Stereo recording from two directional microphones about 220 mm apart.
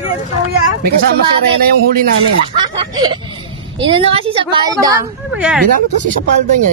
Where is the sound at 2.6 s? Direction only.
20° right (ahead or behind).